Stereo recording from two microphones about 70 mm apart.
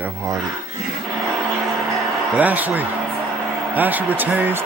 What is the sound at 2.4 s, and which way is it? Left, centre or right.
Speech, right.